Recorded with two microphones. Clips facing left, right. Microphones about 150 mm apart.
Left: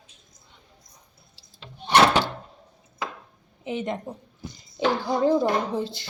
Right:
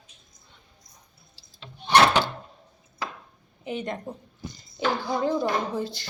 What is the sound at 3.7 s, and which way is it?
Speech, 20° left (ahead or behind).